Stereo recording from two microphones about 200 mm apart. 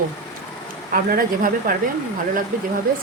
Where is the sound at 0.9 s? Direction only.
45° right (ahead or behind).